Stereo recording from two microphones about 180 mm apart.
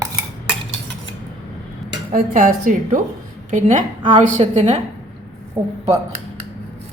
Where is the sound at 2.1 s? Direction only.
45° right (ahead or behind).